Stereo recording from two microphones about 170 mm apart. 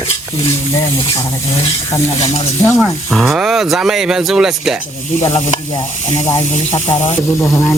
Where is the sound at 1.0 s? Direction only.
30° left (ahead or behind).